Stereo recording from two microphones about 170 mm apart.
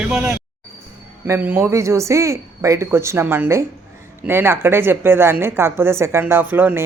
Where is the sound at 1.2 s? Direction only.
15° right (ahead or behind).